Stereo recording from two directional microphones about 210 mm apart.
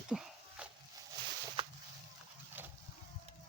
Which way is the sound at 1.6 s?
25° right (ahead or behind).